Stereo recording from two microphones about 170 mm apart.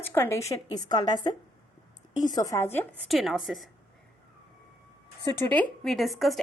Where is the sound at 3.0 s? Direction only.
Centre (ahead or behind).